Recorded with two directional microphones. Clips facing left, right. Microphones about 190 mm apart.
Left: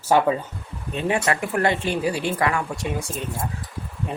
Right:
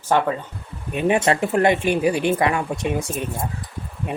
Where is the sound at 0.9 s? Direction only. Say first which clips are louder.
Right 4 dB; 25° right (ahead or behind).